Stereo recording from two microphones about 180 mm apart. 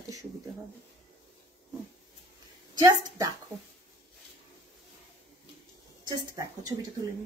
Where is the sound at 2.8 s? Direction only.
20° right (ahead or behind).